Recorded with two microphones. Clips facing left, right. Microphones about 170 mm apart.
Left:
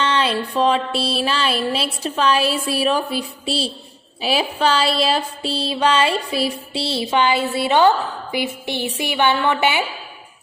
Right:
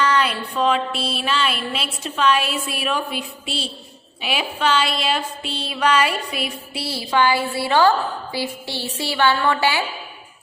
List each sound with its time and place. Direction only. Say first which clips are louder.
0.0 s music: even; 25° left (ahead or behind)